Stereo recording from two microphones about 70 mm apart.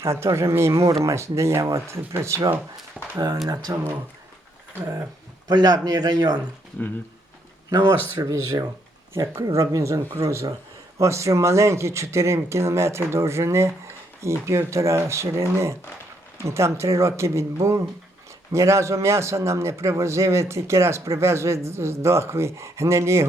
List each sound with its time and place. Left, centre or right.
0.0 s a man's voice: right
3.0 s a sound: right
3.7 s speech: right
4.7 s speech: right
5.5 s speech: right
8.2 s a man's voice: right